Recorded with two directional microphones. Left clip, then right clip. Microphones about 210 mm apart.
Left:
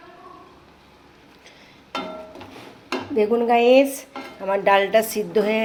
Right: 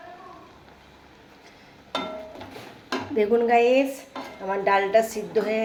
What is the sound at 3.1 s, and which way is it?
Speech, 25° left (ahead or behind).